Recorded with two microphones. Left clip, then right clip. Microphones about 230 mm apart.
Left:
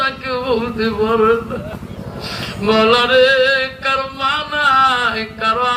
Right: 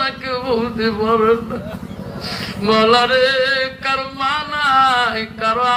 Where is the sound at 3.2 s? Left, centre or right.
Centre.